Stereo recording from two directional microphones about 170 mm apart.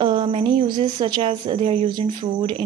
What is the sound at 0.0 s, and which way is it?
Speech, 30° right (ahead or behind).